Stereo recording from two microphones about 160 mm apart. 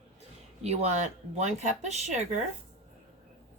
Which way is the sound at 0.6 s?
45° right (ahead or behind).